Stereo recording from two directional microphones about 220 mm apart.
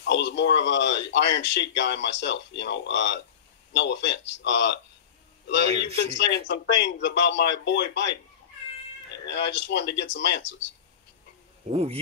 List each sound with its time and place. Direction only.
0.0 s speech: 55° left (ahead or behind)
5.9 s speech: 55° left (ahead or behind)
9.3 s speech: 55° left (ahead or behind)
11.7 s speech: 25° right (ahead or behind)